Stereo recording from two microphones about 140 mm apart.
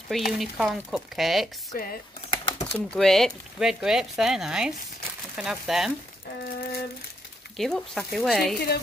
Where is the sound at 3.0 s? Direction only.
5° left (ahead or behind).